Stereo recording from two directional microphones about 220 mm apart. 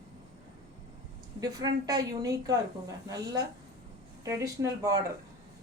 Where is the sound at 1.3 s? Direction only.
15° right (ahead or behind).